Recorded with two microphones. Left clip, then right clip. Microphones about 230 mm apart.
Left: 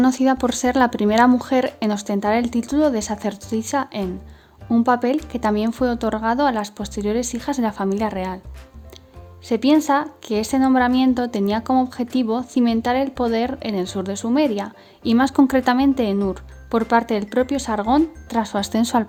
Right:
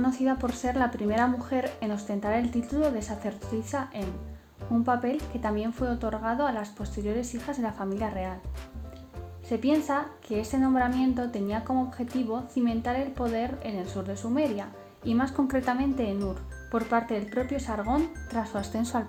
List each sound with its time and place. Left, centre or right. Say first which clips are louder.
0.0 s speech: left 10 dB; left
9.5 s speech: left 10 dB; left